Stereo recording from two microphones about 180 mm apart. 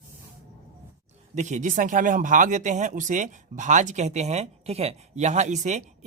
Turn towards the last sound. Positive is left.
turn(degrees=-40)  # may be behind; listen again after turning